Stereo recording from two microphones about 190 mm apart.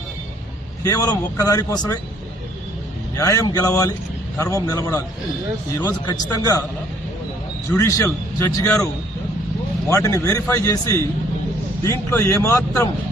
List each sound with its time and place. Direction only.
0.8 s a man's voice: 20° left (ahead or behind)
3.2 s a man's voice: 15° left (ahead or behind)
7.7 s a man's voice: 10° left (ahead or behind)
9.9 s a man's voice: 15° left (ahead or behind)